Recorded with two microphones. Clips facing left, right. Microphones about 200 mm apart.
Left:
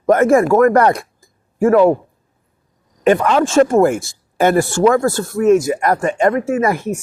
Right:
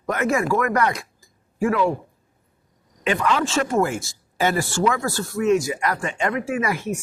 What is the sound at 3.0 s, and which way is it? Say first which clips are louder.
Speech: left 8 dB; 50° left (ahead or behind).